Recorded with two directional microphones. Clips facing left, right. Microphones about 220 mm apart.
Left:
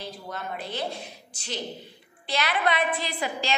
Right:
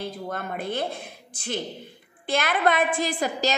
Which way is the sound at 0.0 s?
50° right (ahead or behind).